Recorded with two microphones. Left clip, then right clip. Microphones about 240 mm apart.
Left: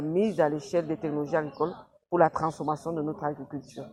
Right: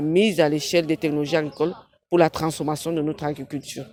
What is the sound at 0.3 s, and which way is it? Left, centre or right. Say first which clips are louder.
Speech: right 6 dB; right.